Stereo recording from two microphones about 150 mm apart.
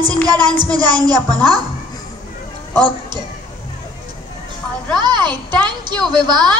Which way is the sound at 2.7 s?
30° right (ahead or behind).